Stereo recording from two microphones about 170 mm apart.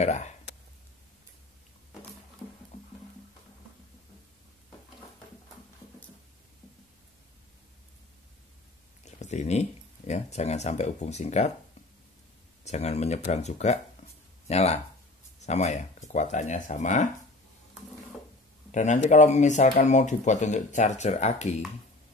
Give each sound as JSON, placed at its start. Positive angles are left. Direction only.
{"t": 0.0, "sound": "speech", "side_deg": 40}
{"t": 9.0, "sound": "speech", "side_deg": 45}
{"t": 12.6, "sound": "speech", "side_deg": 40}
{"t": 18.7, "sound": "speech", "side_deg": 45}